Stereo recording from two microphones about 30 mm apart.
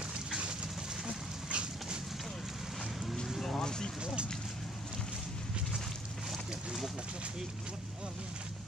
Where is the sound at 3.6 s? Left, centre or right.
Left.